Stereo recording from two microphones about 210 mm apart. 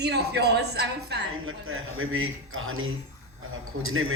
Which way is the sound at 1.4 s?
75° right (ahead or behind).